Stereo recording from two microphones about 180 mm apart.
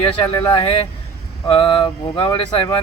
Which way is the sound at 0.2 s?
25° left (ahead or behind).